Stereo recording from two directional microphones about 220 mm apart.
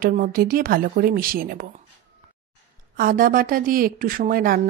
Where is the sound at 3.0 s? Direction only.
40° right (ahead or behind).